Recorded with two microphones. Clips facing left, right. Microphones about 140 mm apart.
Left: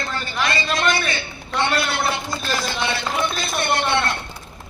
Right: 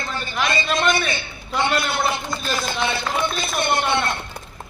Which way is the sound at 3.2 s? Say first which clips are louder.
Even; 20° right (ahead or behind).